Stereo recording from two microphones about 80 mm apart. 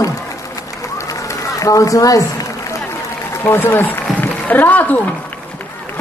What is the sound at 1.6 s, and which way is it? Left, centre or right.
Speech, left.